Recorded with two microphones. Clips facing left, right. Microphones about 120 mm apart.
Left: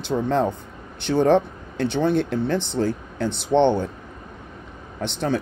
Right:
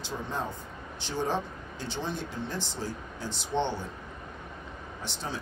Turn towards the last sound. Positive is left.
turn(degrees=65)  # may be behind; listen again after turning